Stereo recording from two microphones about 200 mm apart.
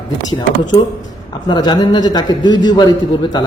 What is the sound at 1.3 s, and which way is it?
A man's voice, 20° left (ahead or behind).